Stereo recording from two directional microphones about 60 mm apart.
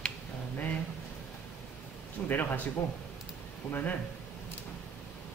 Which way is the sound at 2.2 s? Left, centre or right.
Left.